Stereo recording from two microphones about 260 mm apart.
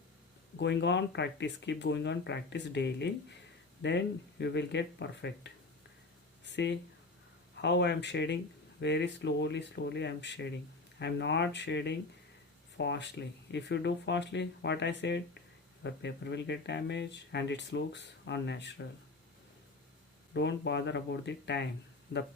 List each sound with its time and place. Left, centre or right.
0.6 s speech: left
20.3 s speech: left